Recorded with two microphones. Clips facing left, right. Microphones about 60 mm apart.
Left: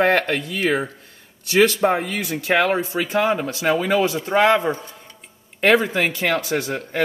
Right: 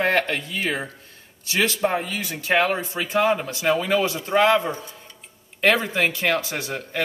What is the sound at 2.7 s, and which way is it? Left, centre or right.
Speech, left.